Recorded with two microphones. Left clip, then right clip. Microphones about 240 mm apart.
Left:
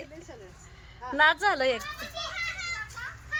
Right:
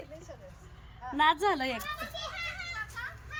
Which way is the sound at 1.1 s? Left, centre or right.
Centre.